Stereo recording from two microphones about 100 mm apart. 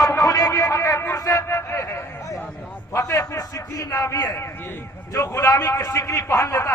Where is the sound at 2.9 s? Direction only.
30° left (ahead or behind).